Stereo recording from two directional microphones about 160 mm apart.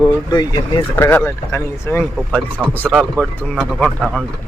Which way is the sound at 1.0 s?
10° left (ahead or behind).